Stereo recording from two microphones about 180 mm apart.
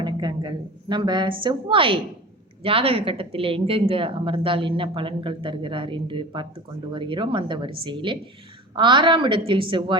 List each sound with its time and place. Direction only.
0.0 s speech: 25° right (ahead or behind)